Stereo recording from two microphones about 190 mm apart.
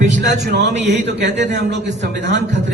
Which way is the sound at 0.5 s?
60° right (ahead or behind).